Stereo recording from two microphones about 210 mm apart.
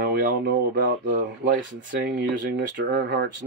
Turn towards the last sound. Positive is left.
turn(degrees=-55)  # may be behind; listen again after turning